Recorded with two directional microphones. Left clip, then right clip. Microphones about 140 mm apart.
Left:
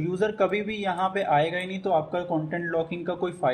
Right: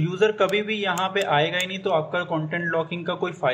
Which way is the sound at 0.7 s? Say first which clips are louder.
Right 2 dB; 25° left (ahead or behind).